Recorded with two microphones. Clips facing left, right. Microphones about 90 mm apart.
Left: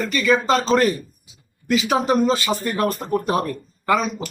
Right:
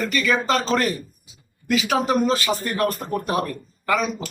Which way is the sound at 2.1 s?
20° left (ahead or behind).